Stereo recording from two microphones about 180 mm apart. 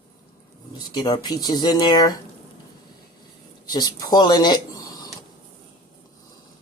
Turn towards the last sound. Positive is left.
turn(degrees=25)  # may be behind; listen again after turning